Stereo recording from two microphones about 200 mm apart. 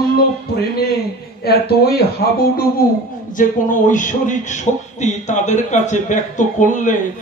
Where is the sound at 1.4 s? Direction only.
50° left (ahead or behind).